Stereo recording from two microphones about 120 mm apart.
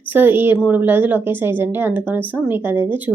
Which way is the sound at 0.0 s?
15° right (ahead or behind).